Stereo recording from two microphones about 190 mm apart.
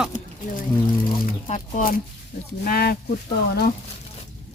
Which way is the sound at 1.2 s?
40° left (ahead or behind).